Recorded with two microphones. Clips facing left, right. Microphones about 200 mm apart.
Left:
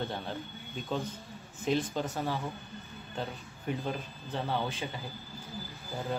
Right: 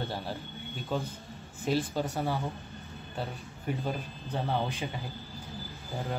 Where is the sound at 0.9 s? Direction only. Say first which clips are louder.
Right 1 dB; 5° right (ahead or behind).